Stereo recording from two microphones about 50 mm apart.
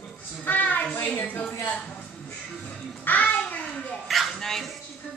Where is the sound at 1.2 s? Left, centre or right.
Left.